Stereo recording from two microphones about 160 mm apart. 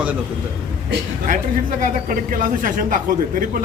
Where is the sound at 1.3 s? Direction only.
55° right (ahead or behind).